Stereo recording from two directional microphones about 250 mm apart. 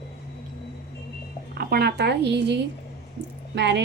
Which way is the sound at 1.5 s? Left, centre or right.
Right.